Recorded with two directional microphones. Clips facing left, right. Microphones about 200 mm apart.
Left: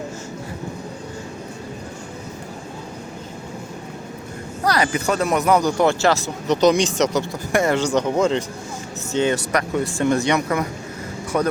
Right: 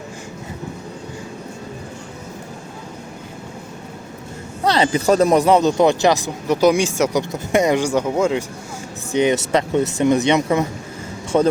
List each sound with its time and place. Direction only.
4.6 s speech: 25° right (ahead or behind); by 8.4 s 10° right (ahead or behind)
9.1 s speech: 20° right (ahead or behind)